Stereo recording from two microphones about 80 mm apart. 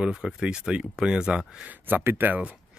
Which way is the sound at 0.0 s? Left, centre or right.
Centre.